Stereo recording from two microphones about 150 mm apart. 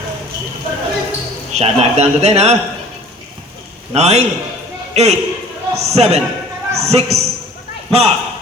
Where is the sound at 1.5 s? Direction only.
45° right (ahead or behind).